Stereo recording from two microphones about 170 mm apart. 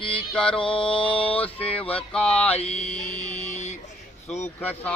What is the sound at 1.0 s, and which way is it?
Mantra, 30° left (ahead or behind).